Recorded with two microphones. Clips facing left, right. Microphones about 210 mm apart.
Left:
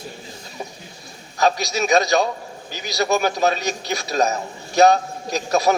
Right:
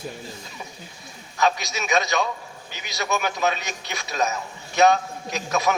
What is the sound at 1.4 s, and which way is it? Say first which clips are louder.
A man's voice: left 4 dB; 35° left (ahead or behind).